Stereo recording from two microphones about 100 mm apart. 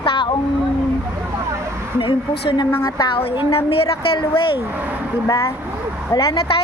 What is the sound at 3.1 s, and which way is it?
Speech, 60° left (ahead or behind).